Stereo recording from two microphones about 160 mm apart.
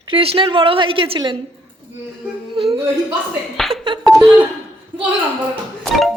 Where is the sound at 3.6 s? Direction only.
Centre (ahead or behind).